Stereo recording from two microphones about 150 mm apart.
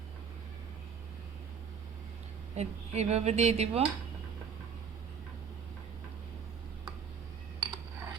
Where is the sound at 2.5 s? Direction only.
45° right (ahead or behind).